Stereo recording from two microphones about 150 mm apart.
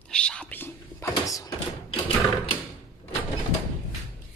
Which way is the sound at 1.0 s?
25° left (ahead or behind).